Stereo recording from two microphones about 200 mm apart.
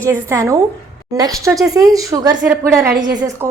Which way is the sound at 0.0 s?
15° right (ahead or behind).